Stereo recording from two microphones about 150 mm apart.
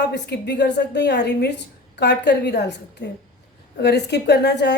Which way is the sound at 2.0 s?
90° left.